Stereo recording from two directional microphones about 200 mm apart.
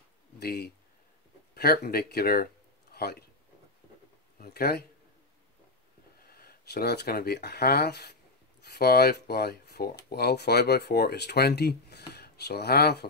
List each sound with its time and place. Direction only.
0.4 s speech: 50° left (ahead or behind)
4.4 s speech: 50° left (ahead or behind)
6.2 s speech: 50° left (ahead or behind)